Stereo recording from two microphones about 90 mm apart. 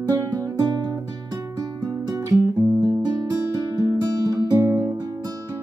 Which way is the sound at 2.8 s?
50° right (ahead or behind).